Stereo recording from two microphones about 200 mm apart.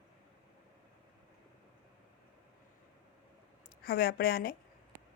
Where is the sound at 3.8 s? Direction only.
50° left (ahead or behind).